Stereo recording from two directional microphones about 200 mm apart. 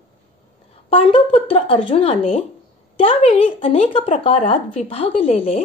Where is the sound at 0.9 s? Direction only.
30° left (ahead or behind).